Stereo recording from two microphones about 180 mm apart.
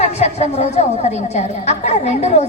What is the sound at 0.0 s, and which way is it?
A woman's voice, 35° left (ahead or behind).